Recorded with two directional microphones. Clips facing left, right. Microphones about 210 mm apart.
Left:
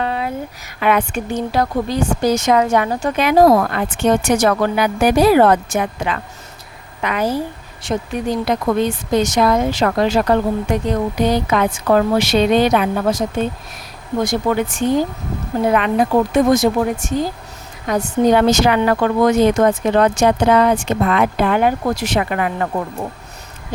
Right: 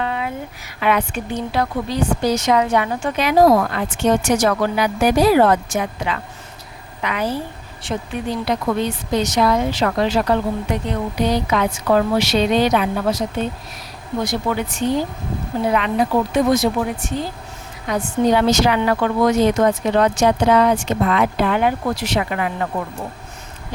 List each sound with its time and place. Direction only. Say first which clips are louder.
0.0 s a sound: left 2 dB; 40° left (ahead or behind)
0.8 s speech: left 2 dB; 50° left (ahead or behind)
3.2 s speech: left 2 dB; 55° left (ahead or behind)
7.0 s speech: left 3 dB; 45° left (ahead or behind)
14.3 s speech: left 5 dB; 50° left (ahead or behind)